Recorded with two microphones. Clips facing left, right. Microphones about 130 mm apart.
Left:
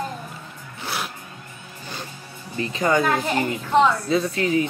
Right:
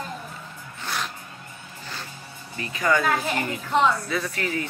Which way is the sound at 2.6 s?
25° left (ahead or behind).